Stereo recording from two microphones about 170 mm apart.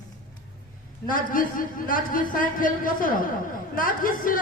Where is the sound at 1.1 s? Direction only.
55° left (ahead or behind).